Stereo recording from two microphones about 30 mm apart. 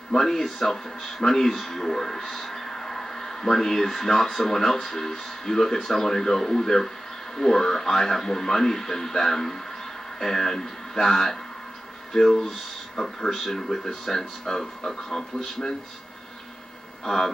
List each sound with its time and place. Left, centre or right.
0.2 s speech: centre